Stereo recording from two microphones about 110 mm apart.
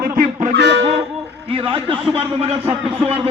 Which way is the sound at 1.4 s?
50° right (ahead or behind).